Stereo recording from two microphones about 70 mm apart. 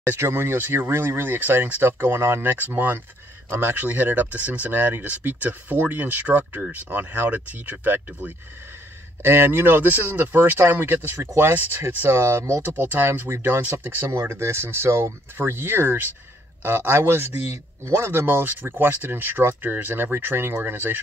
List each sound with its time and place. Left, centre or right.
0.0 s a man's voice: right
3.7 s a man's voice: right
12.6 s a man's voice: right
15.3 s a man's voice: right